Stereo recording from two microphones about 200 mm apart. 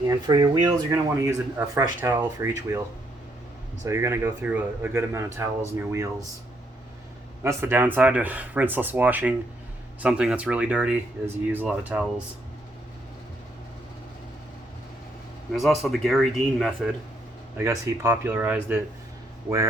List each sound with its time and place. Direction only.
0.1 s speech: 20° right (ahead or behind)
3.8 s speech: 15° right (ahead or behind)
7.4 s speech: 10° right (ahead or behind)
15.5 s speech: centre (ahead or behind)
17.6 s speech: 15° right (ahead or behind)